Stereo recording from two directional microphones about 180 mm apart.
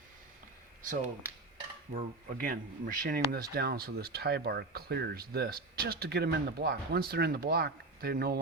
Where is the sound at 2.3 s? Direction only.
55° right (ahead or behind).